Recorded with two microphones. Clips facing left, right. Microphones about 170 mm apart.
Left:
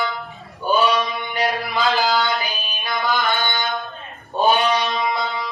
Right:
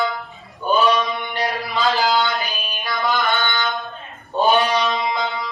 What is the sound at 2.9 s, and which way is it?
Mantra, 20° left (ahead or behind).